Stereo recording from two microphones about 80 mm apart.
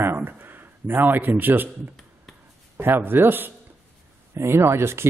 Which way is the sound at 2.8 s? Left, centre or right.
Right.